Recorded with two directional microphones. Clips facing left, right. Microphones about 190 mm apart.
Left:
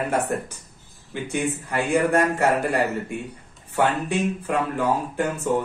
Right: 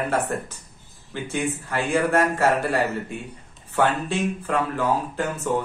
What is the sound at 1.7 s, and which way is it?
Speech, 15° left (ahead or behind).